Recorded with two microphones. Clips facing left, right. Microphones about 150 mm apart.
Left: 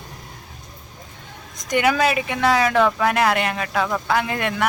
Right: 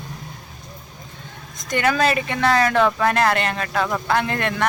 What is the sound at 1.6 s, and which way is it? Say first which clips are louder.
Speech: left 1 dB; 15° left (ahead or behind).